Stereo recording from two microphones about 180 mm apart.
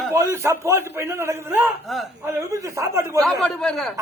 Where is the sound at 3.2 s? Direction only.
Centre (ahead or behind).